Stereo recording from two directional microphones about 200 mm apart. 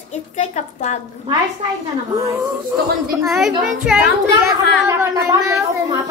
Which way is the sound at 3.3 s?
Centre (ahead or behind).